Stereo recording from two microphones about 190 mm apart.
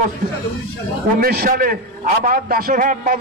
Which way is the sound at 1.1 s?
50° right (ahead or behind).